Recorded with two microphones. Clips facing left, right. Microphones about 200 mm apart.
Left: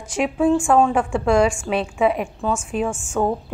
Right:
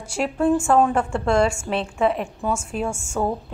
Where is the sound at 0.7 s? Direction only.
5° right (ahead or behind).